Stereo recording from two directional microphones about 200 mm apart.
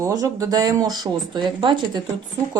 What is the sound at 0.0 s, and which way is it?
Speech, 15° right (ahead or behind).